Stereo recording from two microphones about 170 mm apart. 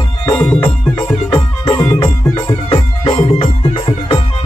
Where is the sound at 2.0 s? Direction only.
25° left (ahead or behind).